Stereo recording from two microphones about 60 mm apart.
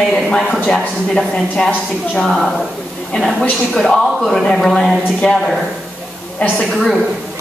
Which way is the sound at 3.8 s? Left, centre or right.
Centre.